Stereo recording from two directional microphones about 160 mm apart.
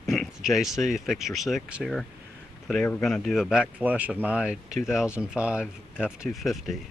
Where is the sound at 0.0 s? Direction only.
Centre (ahead or behind).